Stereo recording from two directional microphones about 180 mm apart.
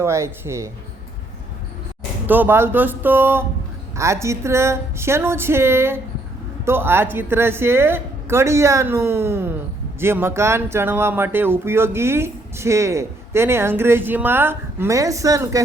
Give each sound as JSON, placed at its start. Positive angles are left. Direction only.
{"t": 0.0, "sound": "speech", "side_deg": -15}
{"t": 2.2, "sound": "speech", "side_deg": -10}